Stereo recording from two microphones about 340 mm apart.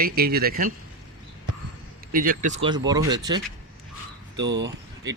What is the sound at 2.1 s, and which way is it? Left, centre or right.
Speech, right.